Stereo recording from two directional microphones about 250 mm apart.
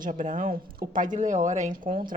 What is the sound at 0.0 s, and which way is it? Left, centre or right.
A woman's voice, right.